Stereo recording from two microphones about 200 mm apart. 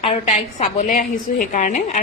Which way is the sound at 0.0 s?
30° left (ahead or behind).